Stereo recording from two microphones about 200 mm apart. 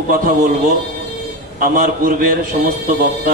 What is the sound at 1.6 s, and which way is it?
A man's voice, 45° right (ahead or behind).